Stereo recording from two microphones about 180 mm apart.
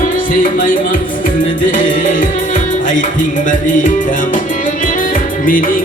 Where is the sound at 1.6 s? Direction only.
45° left (ahead or behind).